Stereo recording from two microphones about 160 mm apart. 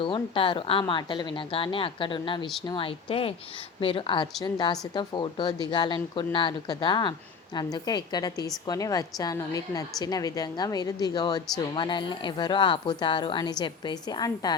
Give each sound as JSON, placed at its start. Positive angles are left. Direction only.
{"t": 0.0, "sound": "a woman's voice", "side_deg": 30}